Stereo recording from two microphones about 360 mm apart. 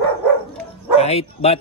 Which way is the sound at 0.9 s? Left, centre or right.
Centre.